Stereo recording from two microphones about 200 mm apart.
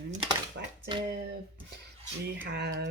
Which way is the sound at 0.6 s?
60° right (ahead or behind).